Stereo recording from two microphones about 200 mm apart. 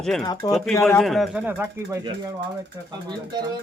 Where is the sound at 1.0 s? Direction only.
Centre (ahead or behind).